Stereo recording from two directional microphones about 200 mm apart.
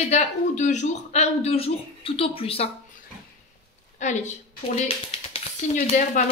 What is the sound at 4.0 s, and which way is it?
Speech, 35° left (ahead or behind).